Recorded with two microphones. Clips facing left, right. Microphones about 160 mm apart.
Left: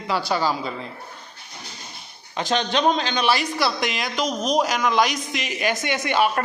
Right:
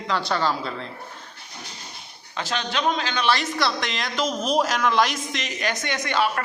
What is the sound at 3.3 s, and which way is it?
Speech, 5° left (ahead or behind).